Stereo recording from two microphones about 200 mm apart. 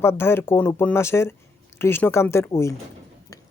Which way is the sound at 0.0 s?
10° left (ahead or behind).